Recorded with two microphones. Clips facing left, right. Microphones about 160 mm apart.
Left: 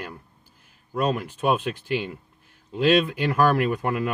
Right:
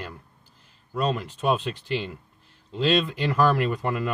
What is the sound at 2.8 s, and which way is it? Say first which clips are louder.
Speech: left 3 dB; 55° left (ahead or behind).